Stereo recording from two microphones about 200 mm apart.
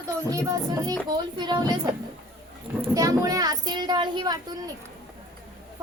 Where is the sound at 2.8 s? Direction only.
15° right (ahead or behind).